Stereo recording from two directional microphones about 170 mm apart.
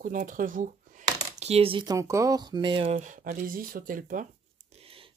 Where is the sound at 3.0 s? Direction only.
50° right (ahead or behind).